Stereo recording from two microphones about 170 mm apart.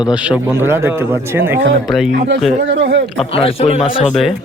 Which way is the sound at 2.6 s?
80° right.